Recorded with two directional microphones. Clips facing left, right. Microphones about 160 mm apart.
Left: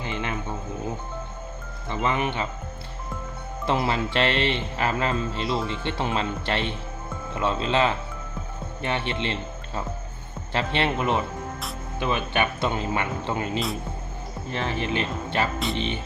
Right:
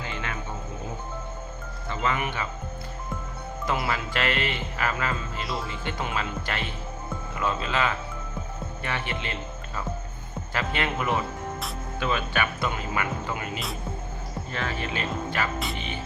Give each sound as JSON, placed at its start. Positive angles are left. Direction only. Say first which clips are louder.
{"t": 0.0, "sound": "music", "louder": "left 4 dB", "side_deg": 20}
{"t": 1.9, "sound": "speech", "louder": "left 3 dB", "side_deg": 20}
{"t": 3.7, "sound": "speech", "louder": "left 4 dB", "side_deg": 25}